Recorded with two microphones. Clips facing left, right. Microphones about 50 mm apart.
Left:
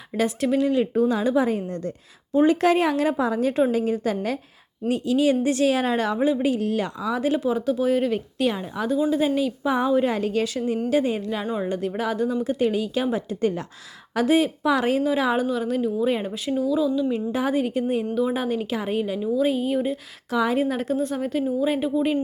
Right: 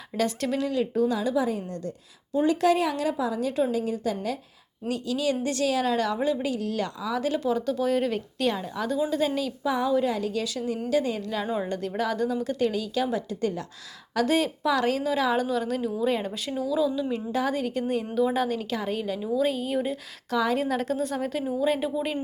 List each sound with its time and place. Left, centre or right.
0.2 s speech: centre
0.7 s a woman's voice: left
4.9 s speech: left
9.7 s a woman's voice: left
11.5 s speech: centre; by 13.7 s left
14.2 s speech: centre
15.4 s speech: centre
17.3 s speech: centre
20.3 s speech: centre